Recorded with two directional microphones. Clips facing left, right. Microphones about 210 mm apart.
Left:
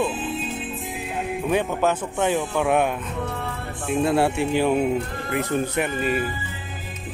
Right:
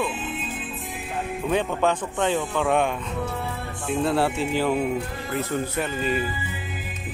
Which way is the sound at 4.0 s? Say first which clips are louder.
Left 2 dB; 15° left (ahead or behind).